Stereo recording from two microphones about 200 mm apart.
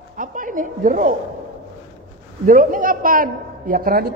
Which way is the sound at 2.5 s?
45° right (ahead or behind).